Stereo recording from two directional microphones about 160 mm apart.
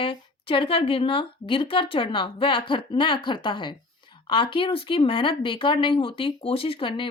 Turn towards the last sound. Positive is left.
turn(degrees=30)  # may be behind; listen again after turning